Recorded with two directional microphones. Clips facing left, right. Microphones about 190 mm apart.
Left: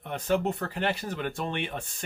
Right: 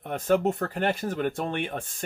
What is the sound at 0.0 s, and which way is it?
Speech, 45° right (ahead or behind).